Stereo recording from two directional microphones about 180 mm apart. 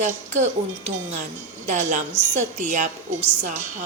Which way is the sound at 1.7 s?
40° right (ahead or behind).